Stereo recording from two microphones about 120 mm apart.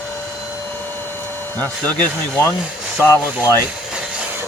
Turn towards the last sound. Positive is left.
turn(degrees=20)  # may be behind; listen again after turning